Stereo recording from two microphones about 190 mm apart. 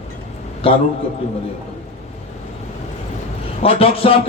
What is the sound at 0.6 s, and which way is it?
Speech, 30° left (ahead or behind).